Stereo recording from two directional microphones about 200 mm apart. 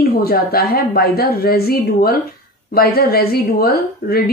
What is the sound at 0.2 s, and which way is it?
A woman's voice, 50° left (ahead or behind).